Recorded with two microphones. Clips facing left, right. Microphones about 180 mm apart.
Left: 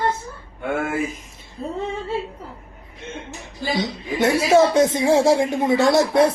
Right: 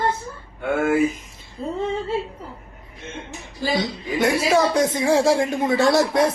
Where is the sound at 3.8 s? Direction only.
25° left (ahead or behind).